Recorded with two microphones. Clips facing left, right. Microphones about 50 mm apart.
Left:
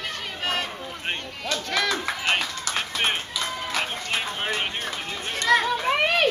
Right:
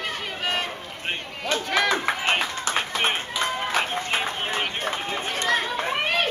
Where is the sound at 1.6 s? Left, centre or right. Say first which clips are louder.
Right 3 dB; right.